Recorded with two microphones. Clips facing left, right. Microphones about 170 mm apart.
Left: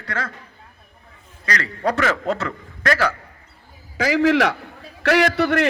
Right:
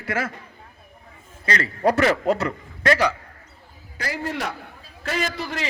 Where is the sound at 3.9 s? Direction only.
90° left.